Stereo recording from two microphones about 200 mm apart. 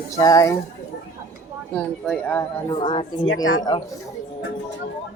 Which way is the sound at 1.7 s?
5° left (ahead or behind).